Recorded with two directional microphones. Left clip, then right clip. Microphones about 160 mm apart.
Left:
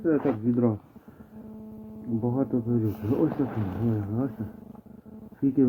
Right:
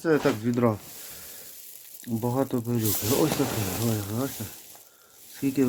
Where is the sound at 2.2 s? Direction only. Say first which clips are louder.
Right 2 dB; 50° right (ahead or behind).